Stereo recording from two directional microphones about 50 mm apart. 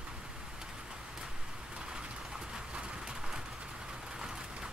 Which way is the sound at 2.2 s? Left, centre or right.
Centre.